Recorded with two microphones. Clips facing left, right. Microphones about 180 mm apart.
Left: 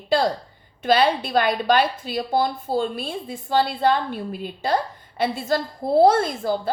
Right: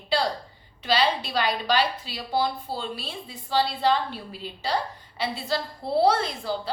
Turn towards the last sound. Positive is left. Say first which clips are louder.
# left 5 dB
turn(degrees=50)  # may be behind; listen again after turning